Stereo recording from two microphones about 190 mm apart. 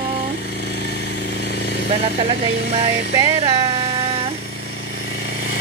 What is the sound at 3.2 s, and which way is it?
Speech, 25° right (ahead or behind).